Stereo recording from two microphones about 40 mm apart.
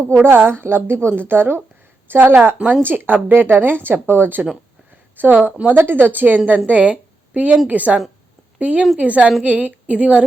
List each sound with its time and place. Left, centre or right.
0.0 s a woman's voice: right
5.1 s speech: right
5.7 s a woman's voice: right
6.9 s a sound: right
7.7 s a woman's voice: right